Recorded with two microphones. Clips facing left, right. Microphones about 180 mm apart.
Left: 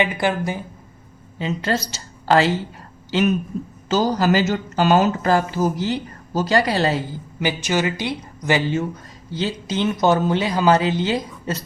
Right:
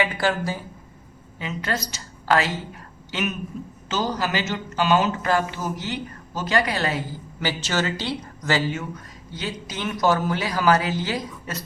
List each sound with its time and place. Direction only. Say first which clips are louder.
0.0 s speech: left 3 dB; 20° left (ahead or behind)
1.4 s a woman's voice: left 5 dB; 30° left (ahead or behind)
7.3 s speech: left 4 dB; 15° left (ahead or behind)
9.3 s speech: left 8 dB; 30° left (ahead or behind)